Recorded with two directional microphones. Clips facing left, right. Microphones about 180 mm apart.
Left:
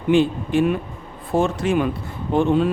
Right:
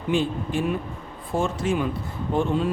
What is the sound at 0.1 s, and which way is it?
A man's voice, 70° left (ahead or behind).